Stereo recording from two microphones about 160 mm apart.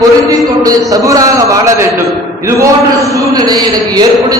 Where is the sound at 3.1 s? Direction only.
20° right (ahead or behind).